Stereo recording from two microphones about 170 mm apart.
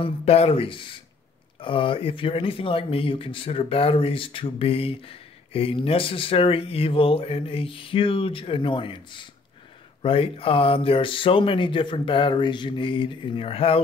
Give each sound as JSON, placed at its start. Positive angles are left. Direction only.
{"t": 0.0, "sound": "speech", "side_deg": 35}